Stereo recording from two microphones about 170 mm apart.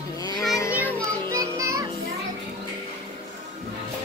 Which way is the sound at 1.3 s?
20° right (ahead or behind).